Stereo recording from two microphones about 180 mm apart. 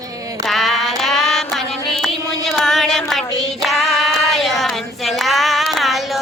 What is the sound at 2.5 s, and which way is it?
Child singing, centre (ahead or behind).